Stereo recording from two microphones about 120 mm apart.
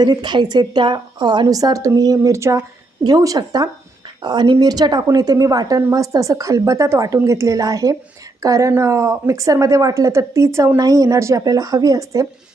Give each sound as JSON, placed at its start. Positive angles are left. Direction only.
{"t": 0.0, "sound": "a woman's voice", "side_deg": -35}